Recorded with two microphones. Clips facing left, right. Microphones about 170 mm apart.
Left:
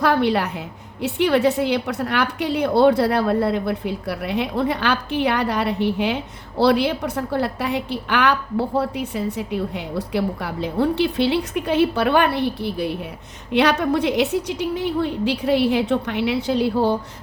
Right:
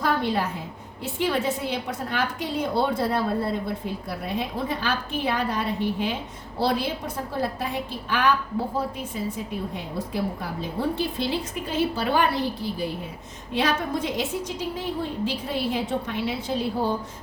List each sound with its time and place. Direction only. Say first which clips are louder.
0.0 s a woman's voice: left 6 dB; 70° left (ahead or behind)